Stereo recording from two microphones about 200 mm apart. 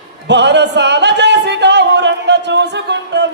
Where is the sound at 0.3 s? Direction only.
60° right (ahead or behind).